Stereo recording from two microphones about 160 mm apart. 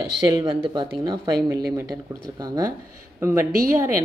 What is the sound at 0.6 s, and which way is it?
Speech, 30° right (ahead or behind).